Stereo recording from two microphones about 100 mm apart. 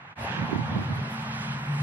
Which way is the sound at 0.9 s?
15° right (ahead or behind).